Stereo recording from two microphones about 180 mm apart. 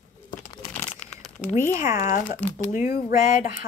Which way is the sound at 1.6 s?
15° right (ahead or behind).